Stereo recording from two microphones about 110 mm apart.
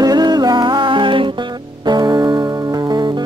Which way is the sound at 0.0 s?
40° right (ahead or behind).